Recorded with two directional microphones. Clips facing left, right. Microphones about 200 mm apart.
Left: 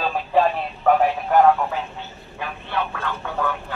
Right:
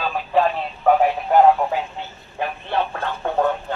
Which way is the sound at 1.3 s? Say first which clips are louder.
Right 2 dB; 20° right (ahead or behind).